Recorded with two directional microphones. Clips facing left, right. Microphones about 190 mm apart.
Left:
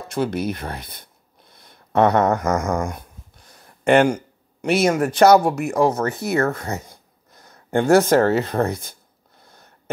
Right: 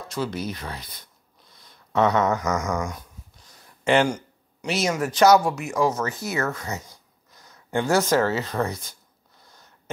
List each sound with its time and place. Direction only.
0.1 s speech: 55° left (ahead or behind)